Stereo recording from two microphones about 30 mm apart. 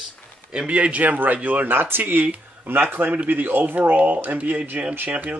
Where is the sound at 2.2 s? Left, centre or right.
Right.